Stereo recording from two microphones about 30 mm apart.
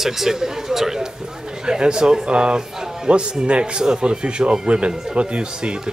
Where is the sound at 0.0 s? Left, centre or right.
Centre.